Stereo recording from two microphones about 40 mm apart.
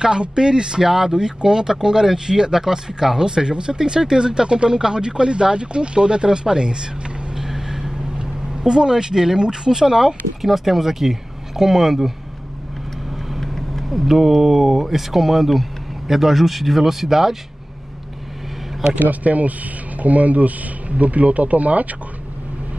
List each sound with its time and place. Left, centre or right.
0.0 s speech: centre
7.3 s vehicle: centre
10.4 s speech: centre
13.4 s speech: centre
18.9 s speech: right